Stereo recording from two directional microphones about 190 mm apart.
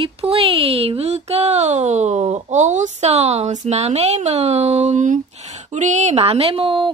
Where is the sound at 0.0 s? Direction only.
30° right (ahead or behind).